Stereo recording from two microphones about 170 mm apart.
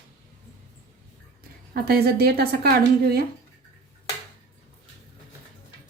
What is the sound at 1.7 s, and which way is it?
A woman's voice, 65° right (ahead or behind).